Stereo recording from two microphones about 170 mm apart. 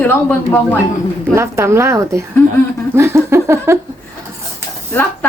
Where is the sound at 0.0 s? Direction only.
10° left (ahead or behind).